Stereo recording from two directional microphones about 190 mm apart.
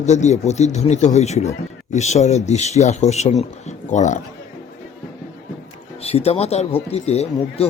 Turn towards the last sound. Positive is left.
turn(degrees=35)  # may be behind; listen again after turning